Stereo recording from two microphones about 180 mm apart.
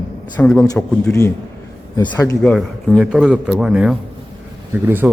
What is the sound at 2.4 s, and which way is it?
A man's voice, 5° left (ahead or behind).